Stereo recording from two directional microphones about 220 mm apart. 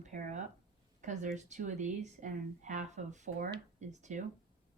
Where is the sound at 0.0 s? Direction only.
30° right (ahead or behind).